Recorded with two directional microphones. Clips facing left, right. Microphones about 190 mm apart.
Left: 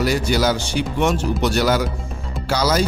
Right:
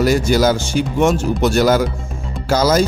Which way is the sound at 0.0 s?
45° right (ahead or behind).